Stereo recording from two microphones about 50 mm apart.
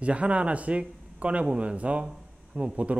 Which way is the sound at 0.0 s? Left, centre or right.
Right.